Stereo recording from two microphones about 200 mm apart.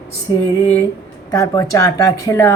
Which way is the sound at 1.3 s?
15° left (ahead or behind).